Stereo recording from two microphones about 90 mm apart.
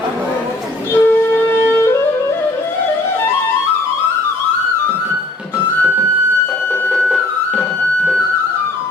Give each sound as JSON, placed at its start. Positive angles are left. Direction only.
{"t": 0.9, "sound": "wind instrument", "side_deg": 25}